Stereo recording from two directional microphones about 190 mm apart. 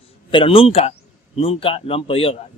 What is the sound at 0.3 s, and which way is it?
Speech, 25° left (ahead or behind).